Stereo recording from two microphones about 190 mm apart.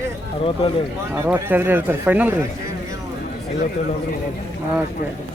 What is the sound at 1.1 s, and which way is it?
Speech, 10° right (ahead or behind).